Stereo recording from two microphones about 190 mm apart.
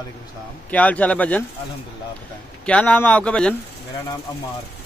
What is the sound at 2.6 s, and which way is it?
Speech, 5° left (ahead or behind).